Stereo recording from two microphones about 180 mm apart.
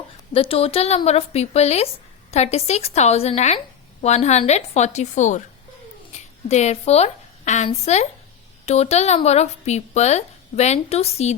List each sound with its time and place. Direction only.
0.3 s a woman's voice: 30° left (ahead or behind)